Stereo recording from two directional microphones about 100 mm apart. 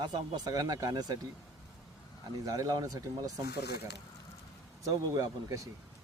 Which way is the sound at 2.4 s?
40° right (ahead or behind).